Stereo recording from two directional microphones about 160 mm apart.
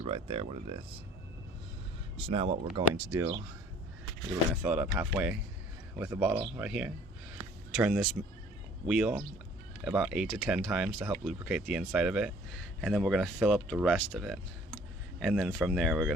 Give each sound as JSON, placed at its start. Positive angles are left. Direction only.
{"t": 0.0, "sound": "speech", "side_deg": -35}
{"t": 2.1, "sound": "speech", "side_deg": -35}
{"t": 2.7, "sound": "speech", "side_deg": -20}
{"t": 4.6, "sound": "speech", "side_deg": -5}